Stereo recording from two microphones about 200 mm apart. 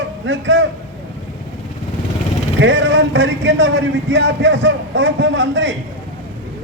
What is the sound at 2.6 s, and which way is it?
A man's voice, 70° right (ahead or behind).